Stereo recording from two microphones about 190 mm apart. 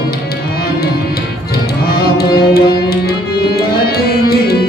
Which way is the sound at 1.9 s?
55° left (ahead or behind).